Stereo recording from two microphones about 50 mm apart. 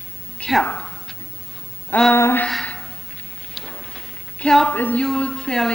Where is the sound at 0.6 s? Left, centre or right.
Left.